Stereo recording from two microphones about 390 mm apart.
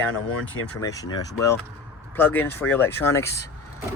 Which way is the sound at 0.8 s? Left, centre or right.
Centre.